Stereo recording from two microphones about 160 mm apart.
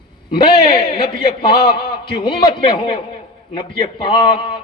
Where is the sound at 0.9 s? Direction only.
30° left (ahead or behind).